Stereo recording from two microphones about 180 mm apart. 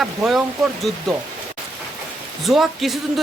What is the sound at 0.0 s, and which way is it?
Speech, centre (ahead or behind).